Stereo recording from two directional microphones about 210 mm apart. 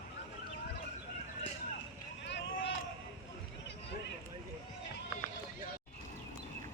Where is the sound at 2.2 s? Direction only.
55° left (ahead or behind).